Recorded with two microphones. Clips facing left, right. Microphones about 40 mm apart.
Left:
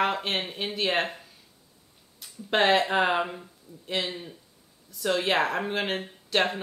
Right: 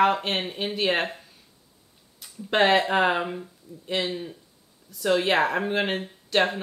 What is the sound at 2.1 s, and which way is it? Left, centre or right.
Speech, centre.